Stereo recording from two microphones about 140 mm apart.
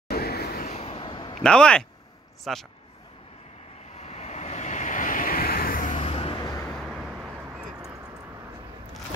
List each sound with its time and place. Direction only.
0.1 s a sound: 90° left
0.7 s vehicle: 50° left (ahead or behind)
1.4 s a man's voice: 5° left (ahead or behind)
3.9 s vehicle: 50° left (ahead or behind)
6.3 s vehicle: 25° left (ahead or behind)
6.7 s vehicle: centre (ahead or behind)